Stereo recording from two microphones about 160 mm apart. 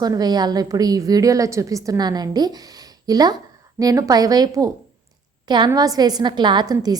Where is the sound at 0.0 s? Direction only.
25° right (ahead or behind).